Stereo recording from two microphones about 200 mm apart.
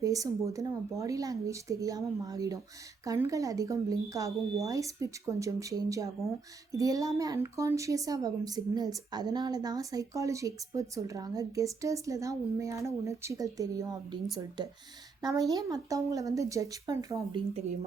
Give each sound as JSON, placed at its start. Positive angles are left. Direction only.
{"t": 0.0, "sound": "a woman's voice", "side_deg": -15}
{"t": 15.2, "sound": "a woman's voice", "side_deg": -20}